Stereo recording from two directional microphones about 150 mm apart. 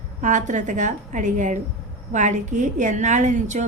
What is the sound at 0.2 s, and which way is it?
A woman's voice, 55° right (ahead or behind).